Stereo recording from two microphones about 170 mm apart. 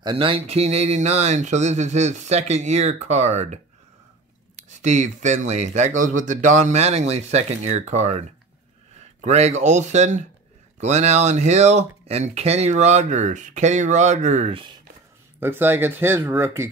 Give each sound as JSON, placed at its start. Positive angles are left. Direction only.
{"t": 0.0, "sound": "speech", "side_deg": -30}
{"t": 15.4, "sound": "speech", "side_deg": -15}